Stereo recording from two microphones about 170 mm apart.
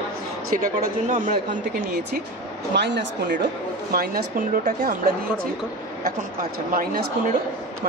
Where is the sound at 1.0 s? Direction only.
50° right (ahead or behind).